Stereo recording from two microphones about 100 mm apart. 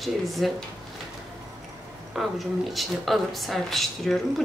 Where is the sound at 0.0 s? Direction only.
Centre (ahead or behind).